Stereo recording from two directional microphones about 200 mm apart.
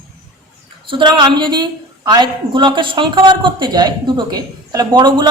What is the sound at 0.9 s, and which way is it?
A woman's voice, 25° right (ahead or behind).